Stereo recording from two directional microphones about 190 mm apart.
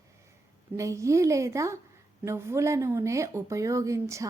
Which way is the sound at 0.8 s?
15° right (ahead or behind).